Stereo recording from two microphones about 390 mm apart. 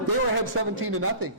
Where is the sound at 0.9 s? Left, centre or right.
Right.